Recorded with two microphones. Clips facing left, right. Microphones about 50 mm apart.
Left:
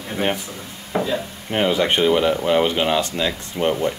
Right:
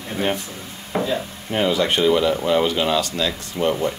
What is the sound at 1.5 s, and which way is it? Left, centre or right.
A man's voice, left.